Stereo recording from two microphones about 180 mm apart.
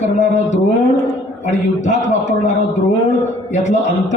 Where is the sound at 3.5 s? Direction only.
40° left (ahead or behind).